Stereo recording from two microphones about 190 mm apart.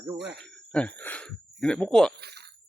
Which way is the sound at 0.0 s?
5° right (ahead or behind).